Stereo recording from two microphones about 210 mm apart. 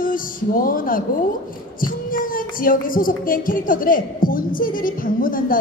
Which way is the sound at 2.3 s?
40° left (ahead or behind).